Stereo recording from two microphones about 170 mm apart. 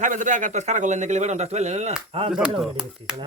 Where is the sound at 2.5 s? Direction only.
5° right (ahead or behind).